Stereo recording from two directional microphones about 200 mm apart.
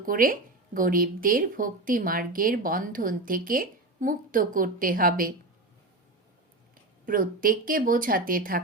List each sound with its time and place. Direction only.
0.0 s a woman's voice: 45° right (ahead or behind)
7.0 s a woman's voice: 45° right (ahead or behind)